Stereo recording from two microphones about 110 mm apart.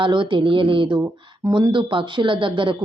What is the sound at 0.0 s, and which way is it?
Speech, 45° right (ahead or behind).